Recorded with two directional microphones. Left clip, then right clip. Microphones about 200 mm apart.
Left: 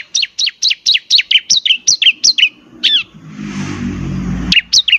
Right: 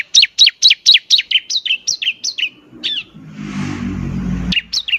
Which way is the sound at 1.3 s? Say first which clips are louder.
Left 5 dB; 30° left (ahead or behind).